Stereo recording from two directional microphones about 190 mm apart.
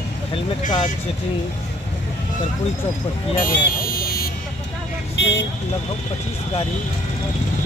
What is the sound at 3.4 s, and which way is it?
Car alarm, 50° left (ahead or behind).